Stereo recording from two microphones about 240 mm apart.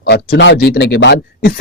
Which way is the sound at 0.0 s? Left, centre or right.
Left.